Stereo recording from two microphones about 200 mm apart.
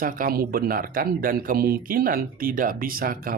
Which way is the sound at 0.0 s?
45° right (ahead or behind).